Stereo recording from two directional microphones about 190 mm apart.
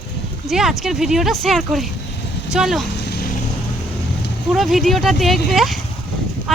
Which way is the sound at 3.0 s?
55° left (ahead or behind).